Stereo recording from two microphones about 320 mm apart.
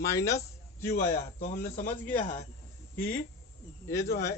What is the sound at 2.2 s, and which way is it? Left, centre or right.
Speech, left.